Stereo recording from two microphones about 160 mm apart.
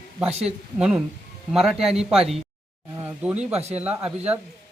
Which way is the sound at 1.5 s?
5° right (ahead or behind).